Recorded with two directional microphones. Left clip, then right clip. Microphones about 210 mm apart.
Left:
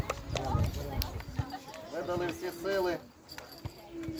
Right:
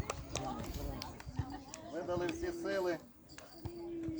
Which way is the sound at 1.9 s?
Centre (ahead or behind).